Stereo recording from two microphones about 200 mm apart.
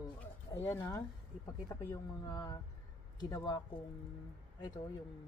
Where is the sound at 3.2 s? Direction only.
20° left (ahead or behind).